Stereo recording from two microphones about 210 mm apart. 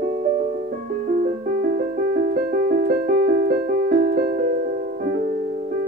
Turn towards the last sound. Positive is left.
turn(degrees=-45)  # may be behind; listen again after turning